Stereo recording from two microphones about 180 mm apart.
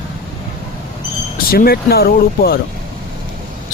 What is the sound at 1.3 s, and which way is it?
Speech, 55° left (ahead or behind).